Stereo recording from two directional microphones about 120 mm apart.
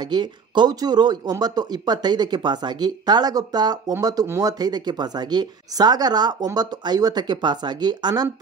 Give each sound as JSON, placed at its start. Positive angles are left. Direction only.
{"t": 0.0, "sound": "speech", "side_deg": -40}